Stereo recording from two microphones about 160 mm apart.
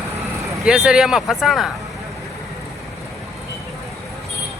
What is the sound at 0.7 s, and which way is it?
Speech, 5° right (ahead or behind).